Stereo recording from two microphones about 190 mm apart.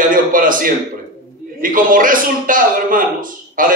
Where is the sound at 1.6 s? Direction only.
45° right (ahead or behind).